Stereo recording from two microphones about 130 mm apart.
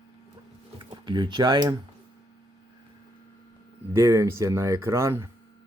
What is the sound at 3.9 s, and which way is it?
Speech, 25° right (ahead or behind).